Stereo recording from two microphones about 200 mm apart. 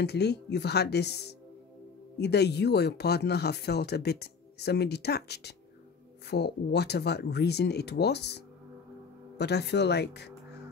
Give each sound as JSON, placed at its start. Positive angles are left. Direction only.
{"t": 0.0, "sound": "speech", "side_deg": 55}